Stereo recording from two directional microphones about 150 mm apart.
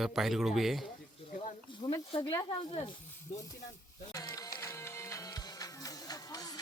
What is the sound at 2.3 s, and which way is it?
Speech, 25° left (ahead or behind).